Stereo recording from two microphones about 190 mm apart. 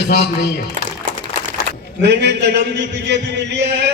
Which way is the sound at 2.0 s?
65° right (ahead or behind).